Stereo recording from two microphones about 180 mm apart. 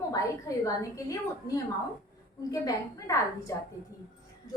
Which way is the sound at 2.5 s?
20° left (ahead or behind).